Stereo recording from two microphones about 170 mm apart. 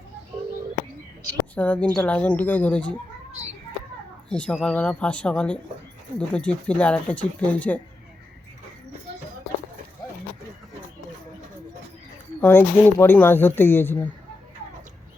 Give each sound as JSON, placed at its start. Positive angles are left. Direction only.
{"t": 1.5, "sound": "speech", "side_deg": 10}
{"t": 4.3, "sound": "speech", "side_deg": 5}
{"t": 12.4, "sound": "speech", "side_deg": 10}